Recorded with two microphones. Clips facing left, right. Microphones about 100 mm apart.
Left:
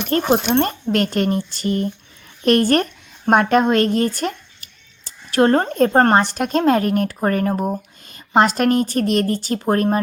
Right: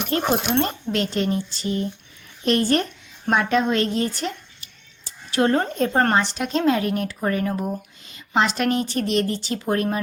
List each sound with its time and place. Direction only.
0.1 s a woman's voice: 45° left (ahead or behind)